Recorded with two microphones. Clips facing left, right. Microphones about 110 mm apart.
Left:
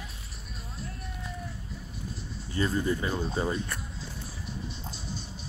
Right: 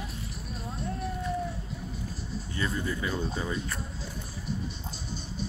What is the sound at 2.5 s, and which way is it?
Speech, 35° left (ahead or behind).